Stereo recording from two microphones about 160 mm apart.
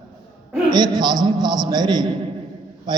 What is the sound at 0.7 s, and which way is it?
A man's voice, 25° right (ahead or behind).